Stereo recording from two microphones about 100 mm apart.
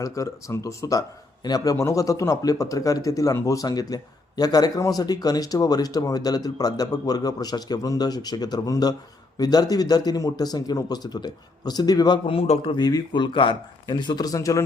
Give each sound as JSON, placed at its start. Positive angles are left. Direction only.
{"t": 0.0, "sound": "speech", "side_deg": 35}
{"t": 12.7, "sound": "speech", "side_deg": 45}